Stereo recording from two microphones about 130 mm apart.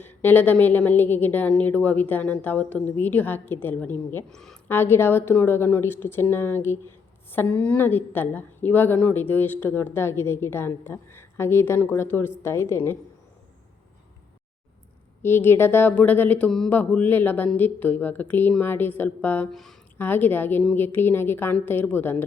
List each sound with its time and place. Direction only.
0.0 s a woman's voice: 15° left (ahead or behind)
4.3 s a woman's voice: 5° left (ahead or behind)
4.7 s a woman's voice: 15° left (ahead or behind)
15.2 s a woman's voice: 15° left (ahead or behind)
20.0 s a woman's voice: 15° left (ahead or behind)